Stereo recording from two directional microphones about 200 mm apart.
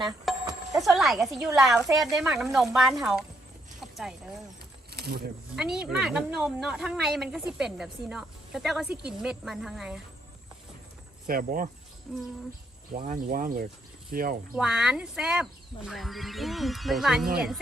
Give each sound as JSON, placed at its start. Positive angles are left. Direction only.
{"t": 0.3, "sound": "music", "side_deg": 0}
{"t": 0.8, "sound": "speech", "side_deg": 0}
{"t": 3.8, "sound": "horse", "side_deg": 0}
{"t": 4.9, "sound": "snake", "side_deg": -50}
{"t": 5.5, "sound": "speech", "side_deg": -5}
{"t": 11.3, "sound": "speech", "side_deg": -45}
{"t": 12.1, "sound": "speech", "side_deg": 5}
{"t": 13.1, "sound": "speech", "side_deg": -45}
{"t": 14.5, "sound": "speech", "side_deg": -5}